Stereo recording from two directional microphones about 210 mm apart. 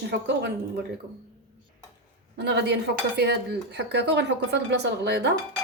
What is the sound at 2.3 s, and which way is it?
A woman's voice, 55° right (ahead or behind).